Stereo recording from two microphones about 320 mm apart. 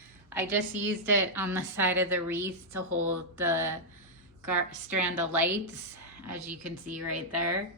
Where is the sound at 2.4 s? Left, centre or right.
Right.